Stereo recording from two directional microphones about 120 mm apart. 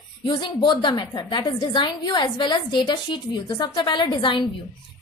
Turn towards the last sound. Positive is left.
turn(degrees=45)  # may be behind; listen again after turning